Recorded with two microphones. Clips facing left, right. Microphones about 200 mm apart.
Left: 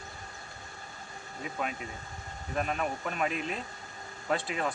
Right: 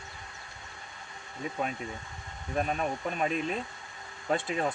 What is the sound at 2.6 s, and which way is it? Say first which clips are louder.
Speech: right 2 dB; 35° right (ahead or behind).